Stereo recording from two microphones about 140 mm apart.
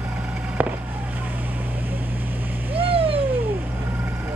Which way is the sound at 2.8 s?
40° right (ahead or behind).